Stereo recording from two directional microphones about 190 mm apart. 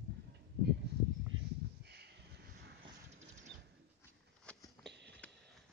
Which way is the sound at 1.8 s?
60° right (ahead or behind).